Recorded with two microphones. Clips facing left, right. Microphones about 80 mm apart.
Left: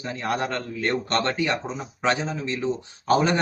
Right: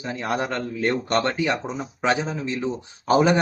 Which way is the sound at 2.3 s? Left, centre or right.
Centre.